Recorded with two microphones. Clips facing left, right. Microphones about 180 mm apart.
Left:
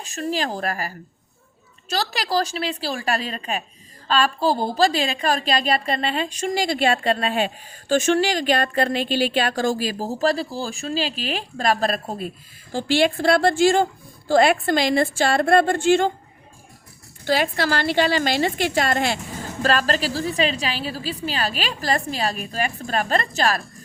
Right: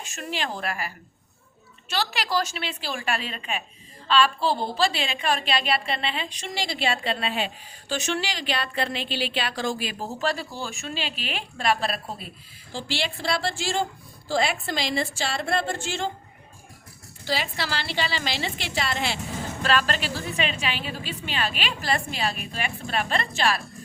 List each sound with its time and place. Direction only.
0.0 s a woman's voice: 35° left (ahead or behind); by 16.0 s 55° left (ahead or behind)
17.2 s a woman's voice: 50° left (ahead or behind)